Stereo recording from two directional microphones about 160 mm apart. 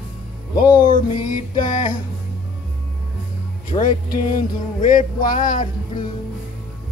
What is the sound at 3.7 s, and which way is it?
Music, 60° left (ahead or behind).